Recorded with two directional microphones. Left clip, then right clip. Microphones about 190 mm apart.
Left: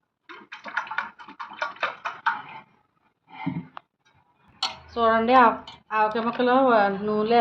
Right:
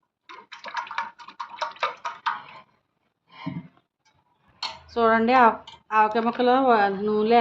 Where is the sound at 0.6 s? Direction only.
5° right (ahead or behind).